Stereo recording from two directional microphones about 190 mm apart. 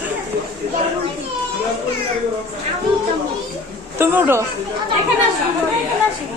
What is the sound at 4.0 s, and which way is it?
Speech, 10° right (ahead or behind).